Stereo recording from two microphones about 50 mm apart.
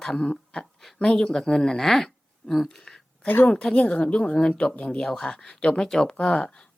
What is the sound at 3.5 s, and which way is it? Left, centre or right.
Speech, centre.